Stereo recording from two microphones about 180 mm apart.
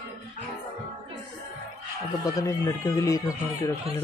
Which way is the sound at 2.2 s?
20° left (ahead or behind).